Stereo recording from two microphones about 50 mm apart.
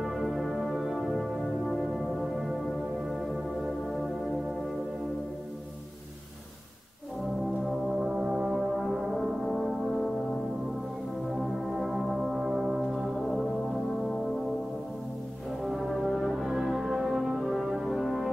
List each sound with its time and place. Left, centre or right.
0.0 s music: centre
7.6 s music: centre
8.1 s music: right; by 12.4 s centre
12.4 s music: centre
15.6 s brass instrument: centre
16.4 s music: centre
17.0 s brass instrument: centre